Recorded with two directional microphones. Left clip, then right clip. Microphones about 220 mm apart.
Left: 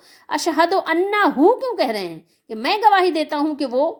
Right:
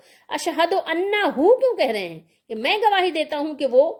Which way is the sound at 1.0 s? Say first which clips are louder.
Left 3 dB; 60° left (ahead or behind).